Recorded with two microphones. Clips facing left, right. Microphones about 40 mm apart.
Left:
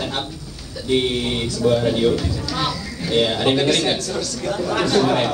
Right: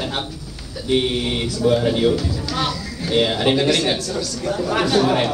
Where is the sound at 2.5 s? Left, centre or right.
Right.